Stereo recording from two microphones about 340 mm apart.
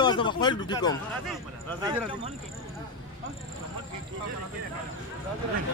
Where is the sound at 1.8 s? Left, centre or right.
Centre.